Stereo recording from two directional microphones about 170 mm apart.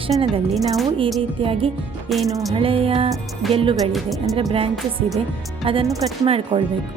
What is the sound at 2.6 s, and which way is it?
Music, 30° right (ahead or behind).